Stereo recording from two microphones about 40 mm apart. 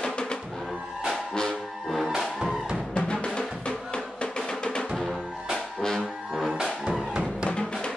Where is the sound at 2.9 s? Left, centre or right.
Left.